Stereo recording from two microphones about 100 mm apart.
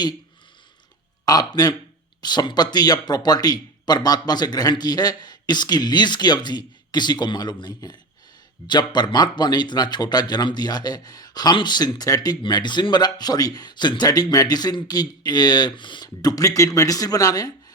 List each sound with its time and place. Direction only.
1.2 s a man's voice: 40° left (ahead or behind)
16.0 s speech: 35° left (ahead or behind)